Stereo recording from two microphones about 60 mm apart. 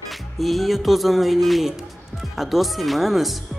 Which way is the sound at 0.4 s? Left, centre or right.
Centre.